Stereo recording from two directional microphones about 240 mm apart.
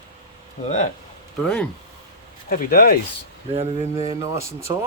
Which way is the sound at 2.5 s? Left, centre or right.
Left.